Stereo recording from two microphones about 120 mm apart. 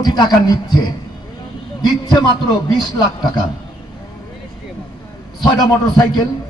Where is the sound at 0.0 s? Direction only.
35° left (ahead or behind).